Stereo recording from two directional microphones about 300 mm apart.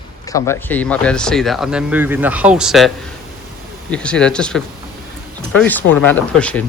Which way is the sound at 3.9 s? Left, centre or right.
Centre.